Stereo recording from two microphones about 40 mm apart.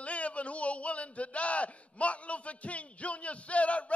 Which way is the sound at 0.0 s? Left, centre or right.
Left.